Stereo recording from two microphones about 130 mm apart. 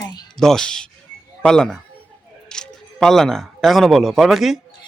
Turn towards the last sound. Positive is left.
turn(degrees=0)  # may be behind; listen again after turning